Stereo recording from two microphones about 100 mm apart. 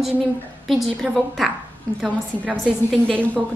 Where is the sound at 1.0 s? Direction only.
5° left (ahead or behind).